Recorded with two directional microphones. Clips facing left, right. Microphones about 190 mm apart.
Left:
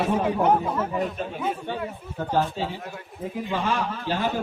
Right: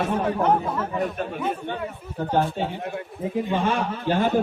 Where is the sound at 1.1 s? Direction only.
55° right (ahead or behind).